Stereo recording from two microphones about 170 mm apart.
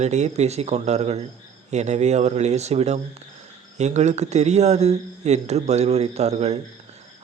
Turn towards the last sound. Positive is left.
turn(degrees=-40)  # may be behind; listen again after turning